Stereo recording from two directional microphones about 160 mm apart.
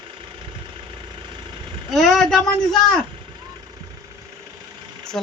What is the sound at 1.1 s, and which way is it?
Vehicle, 30° right (ahead or behind).